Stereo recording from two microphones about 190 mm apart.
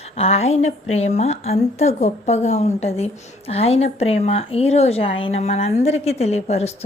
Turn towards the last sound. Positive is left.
turn(degrees=35)  # may be behind; listen again after turning